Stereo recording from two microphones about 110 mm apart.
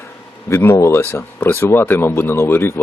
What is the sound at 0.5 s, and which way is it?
Speech, 25° left (ahead or behind).